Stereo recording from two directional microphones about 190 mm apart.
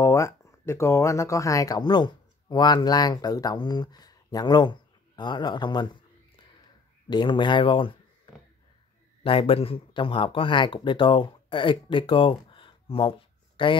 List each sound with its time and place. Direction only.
0.0 s speech: 15° left (ahead or behind)
7.1 s speech: 25° left (ahead or behind)
9.2 s speech: 30° left (ahead or behind)